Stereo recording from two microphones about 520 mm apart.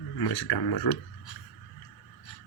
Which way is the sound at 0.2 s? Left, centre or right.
Left.